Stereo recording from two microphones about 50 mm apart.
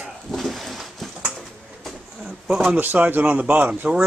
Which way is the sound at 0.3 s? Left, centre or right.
Centre.